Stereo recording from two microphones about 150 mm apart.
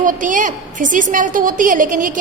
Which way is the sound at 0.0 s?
60° right (ahead or behind).